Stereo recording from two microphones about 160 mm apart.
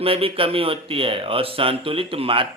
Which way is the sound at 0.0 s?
35° right (ahead or behind).